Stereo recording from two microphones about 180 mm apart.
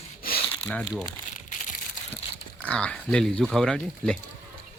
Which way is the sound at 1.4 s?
45° left (ahead or behind).